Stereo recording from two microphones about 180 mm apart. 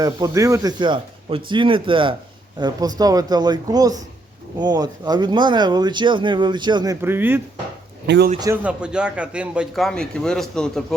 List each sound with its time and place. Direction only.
0.0 s speech: 20° right (ahead or behind)
7.0 s speech: 10° right (ahead or behind)
8.0 s a man's voice: 70° right (ahead or behind)
8.6 s a man's voice: 5° right (ahead or behind)